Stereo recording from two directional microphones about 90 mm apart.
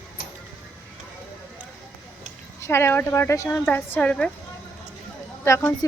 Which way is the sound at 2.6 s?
30° left (ahead or behind).